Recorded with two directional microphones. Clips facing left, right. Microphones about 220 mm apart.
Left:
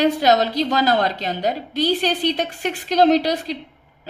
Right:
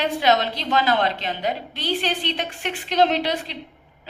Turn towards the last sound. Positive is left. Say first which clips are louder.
# left 6 dB
turn(degrees=40)  # may be behind; listen again after turning